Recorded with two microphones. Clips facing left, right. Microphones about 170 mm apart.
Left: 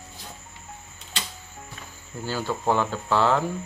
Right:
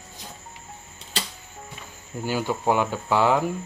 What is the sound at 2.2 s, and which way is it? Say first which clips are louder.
Speech: right 2 dB; 15° right (ahead or behind).